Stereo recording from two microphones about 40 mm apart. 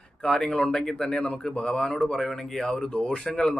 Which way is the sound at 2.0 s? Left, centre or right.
Centre.